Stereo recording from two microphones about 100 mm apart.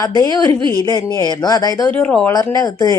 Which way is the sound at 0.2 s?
40° left (ahead or behind).